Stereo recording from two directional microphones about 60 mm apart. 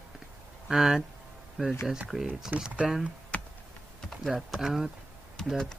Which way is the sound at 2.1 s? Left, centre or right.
Centre.